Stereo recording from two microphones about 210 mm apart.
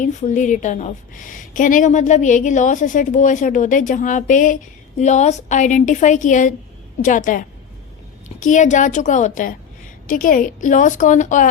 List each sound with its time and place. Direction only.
0.0 s a woman's voice: 35° left (ahead or behind)